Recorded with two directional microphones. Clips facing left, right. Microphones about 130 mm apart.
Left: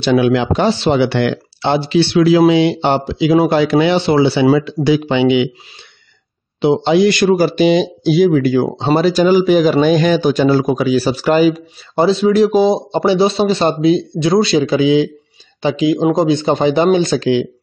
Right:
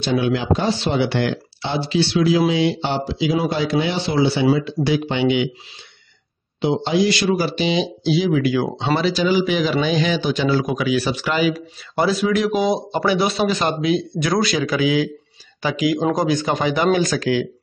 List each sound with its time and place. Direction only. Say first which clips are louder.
0.0 s speech: left 7 dB; 75° left (ahead or behind); by 5.5 s 90° left
6.6 s speech: left 7 dB; 75° left (ahead or behind); by 7.2 s 55° left (ahead or behind)
7.2 s speech: left 8 dB; 45° left (ahead or behind)
11.5 s speech: left 5 dB; 25° left (ahead or behind)